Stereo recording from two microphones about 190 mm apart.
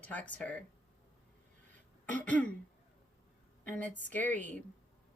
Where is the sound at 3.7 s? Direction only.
10° left (ahead or behind).